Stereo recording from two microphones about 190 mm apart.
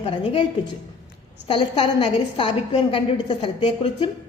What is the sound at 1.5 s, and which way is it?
Speech, 30° left (ahead or behind).